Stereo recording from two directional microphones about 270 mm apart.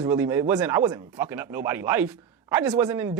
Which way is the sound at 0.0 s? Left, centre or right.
Centre.